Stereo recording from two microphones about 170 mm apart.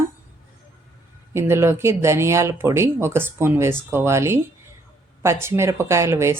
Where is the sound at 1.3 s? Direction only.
15° right (ahead or behind).